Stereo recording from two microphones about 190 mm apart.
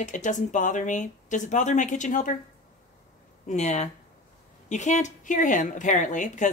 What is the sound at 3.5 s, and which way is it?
Speech, 40° left (ahead or behind).